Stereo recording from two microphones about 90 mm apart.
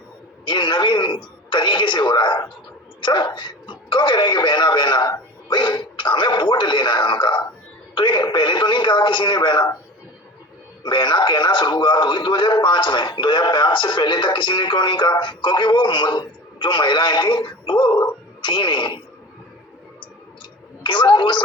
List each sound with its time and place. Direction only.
0.4 s speech: 60° left (ahead or behind)
10.8 s speech: 60° left (ahead or behind)
20.8 s speech: 65° left (ahead or behind)